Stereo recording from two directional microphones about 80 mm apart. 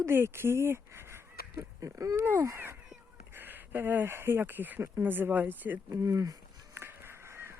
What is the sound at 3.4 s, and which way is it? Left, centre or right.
Speech, right.